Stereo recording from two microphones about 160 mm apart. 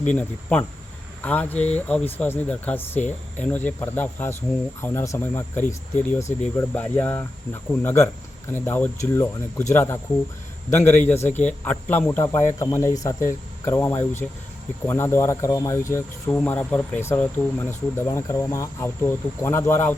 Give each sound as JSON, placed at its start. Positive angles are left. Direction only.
{"t": 0.0, "sound": "speech", "side_deg": 10}
{"t": 14.8, "sound": "speech", "side_deg": 15}